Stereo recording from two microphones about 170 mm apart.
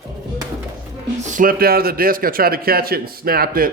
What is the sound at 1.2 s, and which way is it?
Speech, 50° right (ahead or behind).